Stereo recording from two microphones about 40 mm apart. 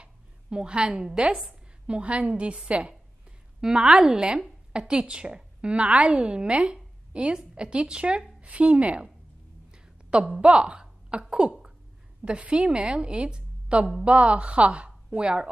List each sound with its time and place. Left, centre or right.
0.0 s speech: right
1.9 s a woman's voice: right
3.6 s a woman's voice: right
10.3 s a woman's voice: right